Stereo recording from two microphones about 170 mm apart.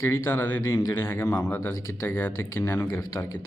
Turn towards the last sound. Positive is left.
turn(degrees=15)  # may be behind; listen again after turning